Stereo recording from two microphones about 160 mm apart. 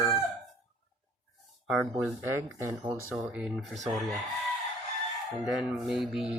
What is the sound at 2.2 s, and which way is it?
Speech, 15° right (ahead or behind).